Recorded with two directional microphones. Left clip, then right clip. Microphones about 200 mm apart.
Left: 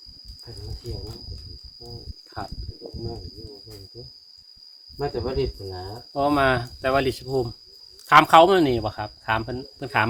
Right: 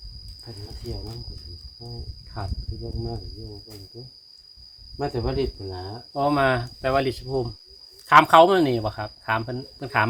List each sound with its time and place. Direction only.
2.4 s speech: 20° left (ahead or behind)
4.9 s speech: 55° right (ahead or behind)
6.1 s speech: 20° left (ahead or behind)